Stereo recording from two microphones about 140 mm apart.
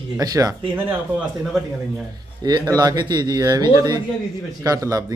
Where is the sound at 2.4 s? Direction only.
30° right (ahead or behind).